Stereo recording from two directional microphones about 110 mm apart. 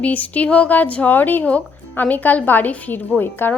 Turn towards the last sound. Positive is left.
turn(degrees=15)  # may be behind; listen again after turning